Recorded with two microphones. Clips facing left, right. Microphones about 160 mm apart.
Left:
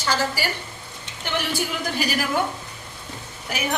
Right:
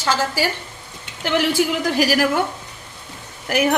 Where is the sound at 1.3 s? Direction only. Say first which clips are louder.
Right 8 dB; 90° right.